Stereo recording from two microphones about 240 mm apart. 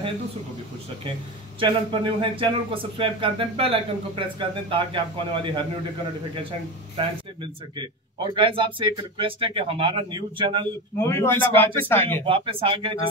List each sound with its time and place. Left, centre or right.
1.6 s speech: right
7.7 s speech: centre
11.0 s speech: centre
12.3 s speech: right